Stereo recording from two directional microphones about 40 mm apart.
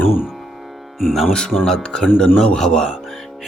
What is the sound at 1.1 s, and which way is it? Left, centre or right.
Speech, centre.